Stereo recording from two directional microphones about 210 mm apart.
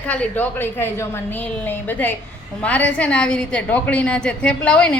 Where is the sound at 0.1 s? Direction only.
10° left (ahead or behind).